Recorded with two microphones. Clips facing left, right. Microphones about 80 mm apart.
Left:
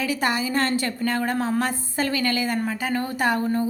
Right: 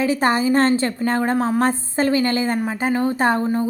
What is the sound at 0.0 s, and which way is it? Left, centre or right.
A woman's voice, right.